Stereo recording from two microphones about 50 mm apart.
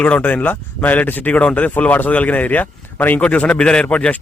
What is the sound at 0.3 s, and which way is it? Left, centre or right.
Speech, left.